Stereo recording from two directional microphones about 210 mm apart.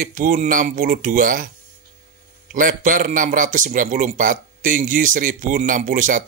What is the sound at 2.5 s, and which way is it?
A man's voice, 40° right (ahead or behind).